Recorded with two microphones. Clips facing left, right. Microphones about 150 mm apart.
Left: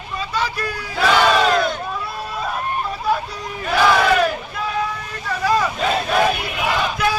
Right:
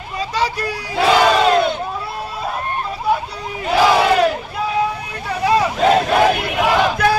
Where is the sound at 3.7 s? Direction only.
30° right (ahead or behind).